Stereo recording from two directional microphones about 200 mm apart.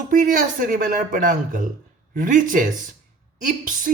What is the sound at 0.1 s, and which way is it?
A man's voice, 40° right (ahead or behind).